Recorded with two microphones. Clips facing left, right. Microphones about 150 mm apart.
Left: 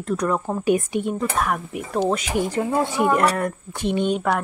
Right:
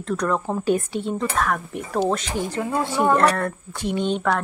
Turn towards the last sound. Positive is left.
turn(degrees=10)  # may be behind; listen again after turning